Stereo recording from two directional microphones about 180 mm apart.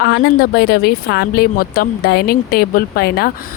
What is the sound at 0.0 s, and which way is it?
Speech, 65° left (ahead or behind).